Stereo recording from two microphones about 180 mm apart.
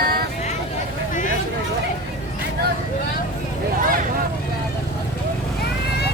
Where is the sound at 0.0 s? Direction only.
55° right (ahead or behind).